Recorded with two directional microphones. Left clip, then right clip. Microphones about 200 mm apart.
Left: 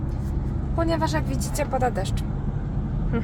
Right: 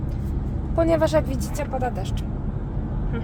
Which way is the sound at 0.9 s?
30° right (ahead or behind).